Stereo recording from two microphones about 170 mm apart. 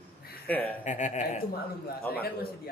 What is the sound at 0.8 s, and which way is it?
Speech, 45° left (ahead or behind).